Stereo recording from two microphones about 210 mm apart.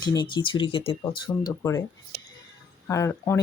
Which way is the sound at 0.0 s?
20° left (ahead or behind).